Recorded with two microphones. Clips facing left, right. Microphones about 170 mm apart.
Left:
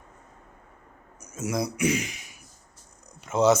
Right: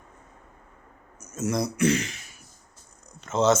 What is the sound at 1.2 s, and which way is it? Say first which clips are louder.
A man's voice: right 2 dB; 10° left (ahead or behind).